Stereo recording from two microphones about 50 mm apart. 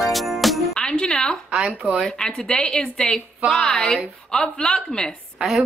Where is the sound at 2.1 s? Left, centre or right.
Centre.